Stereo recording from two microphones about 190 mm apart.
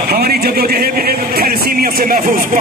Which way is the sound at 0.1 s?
55° right (ahead or behind).